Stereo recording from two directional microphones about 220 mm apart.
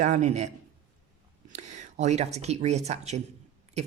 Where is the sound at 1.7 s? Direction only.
30° right (ahead or behind).